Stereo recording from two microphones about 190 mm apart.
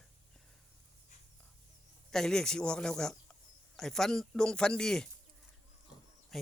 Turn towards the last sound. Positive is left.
turn(degrees=0)  # may be behind; listen again after turning